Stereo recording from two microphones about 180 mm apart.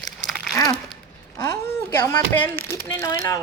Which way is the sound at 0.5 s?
20° left (ahead or behind).